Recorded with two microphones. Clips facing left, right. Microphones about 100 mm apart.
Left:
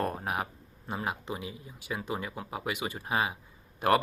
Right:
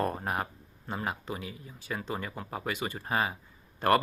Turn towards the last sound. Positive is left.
turn(degrees=10)  # may be behind; listen again after turning